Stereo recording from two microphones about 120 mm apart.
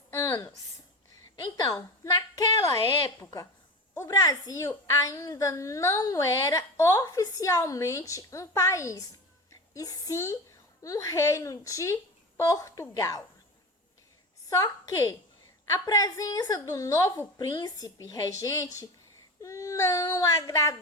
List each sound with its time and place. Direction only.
0.1 s a sound: 20° left (ahead or behind)
0.3 s a woman's voice: 30° left (ahead or behind)
14.5 s a woman's voice: 25° left (ahead or behind)